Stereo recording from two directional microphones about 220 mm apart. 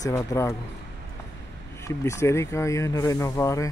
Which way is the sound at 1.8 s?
15° left (ahead or behind).